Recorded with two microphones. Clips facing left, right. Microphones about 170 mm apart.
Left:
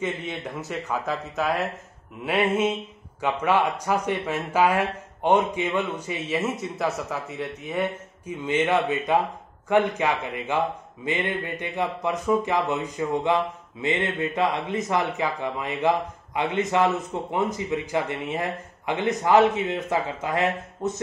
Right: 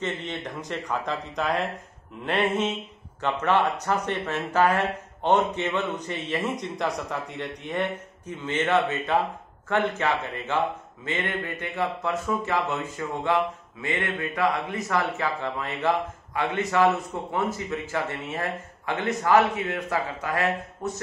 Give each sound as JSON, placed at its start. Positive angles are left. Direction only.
{"t": 0.0, "sound": "a man's voice", "side_deg": 10}